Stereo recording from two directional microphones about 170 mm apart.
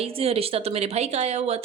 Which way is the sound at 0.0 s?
35° right (ahead or behind).